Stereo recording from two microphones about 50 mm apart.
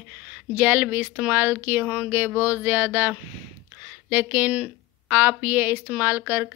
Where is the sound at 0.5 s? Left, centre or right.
Right.